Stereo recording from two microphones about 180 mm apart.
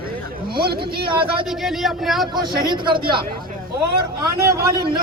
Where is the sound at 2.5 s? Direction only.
25° right (ahead or behind).